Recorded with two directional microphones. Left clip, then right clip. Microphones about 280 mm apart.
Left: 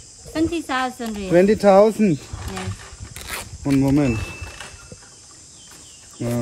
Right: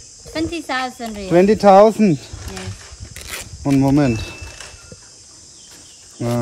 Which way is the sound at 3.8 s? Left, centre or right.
Right.